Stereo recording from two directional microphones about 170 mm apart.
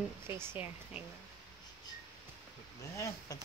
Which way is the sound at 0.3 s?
15° right (ahead or behind).